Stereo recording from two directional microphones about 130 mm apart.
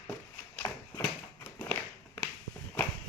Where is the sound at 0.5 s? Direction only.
20° left (ahead or behind).